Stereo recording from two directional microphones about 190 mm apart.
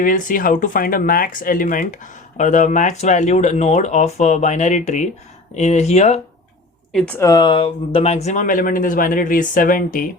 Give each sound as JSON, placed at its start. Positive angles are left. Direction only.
{"t": 0.0, "sound": "speech", "side_deg": 45}
{"t": 6.9, "sound": "speech", "side_deg": 10}
{"t": 7.3, "sound": "speech", "side_deg": 25}